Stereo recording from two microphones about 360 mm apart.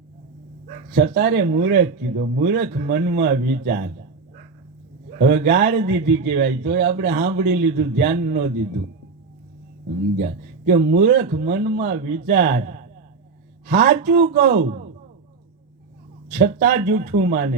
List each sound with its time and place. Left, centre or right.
0.9 s a man's voice: right
5.1 s a man's voice: right
10.7 s a man's voice: right
13.7 s a man's voice: right
16.3 s a man's voice: right